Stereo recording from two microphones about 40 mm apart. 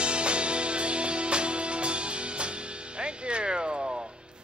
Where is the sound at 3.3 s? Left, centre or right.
Right.